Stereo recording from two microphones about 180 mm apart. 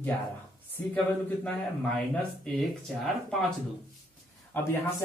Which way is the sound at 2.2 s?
5° left (ahead or behind).